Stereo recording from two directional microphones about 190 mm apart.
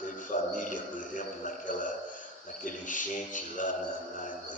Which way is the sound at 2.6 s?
45° left (ahead or behind).